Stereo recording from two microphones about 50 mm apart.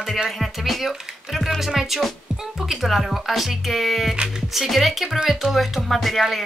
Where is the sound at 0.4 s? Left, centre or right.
Centre.